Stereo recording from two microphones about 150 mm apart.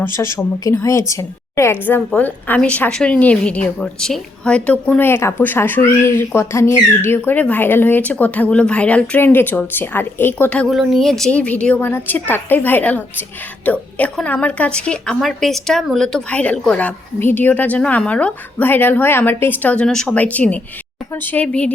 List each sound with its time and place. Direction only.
0.0 s a woman's voice: 20° left (ahead or behind)